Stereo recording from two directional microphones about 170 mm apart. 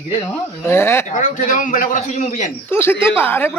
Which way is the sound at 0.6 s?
15° left (ahead or behind).